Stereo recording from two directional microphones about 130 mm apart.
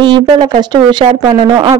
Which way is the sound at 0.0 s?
35° right (ahead or behind).